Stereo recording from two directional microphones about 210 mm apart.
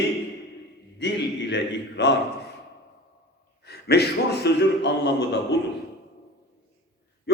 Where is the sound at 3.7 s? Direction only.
50° left (ahead or behind).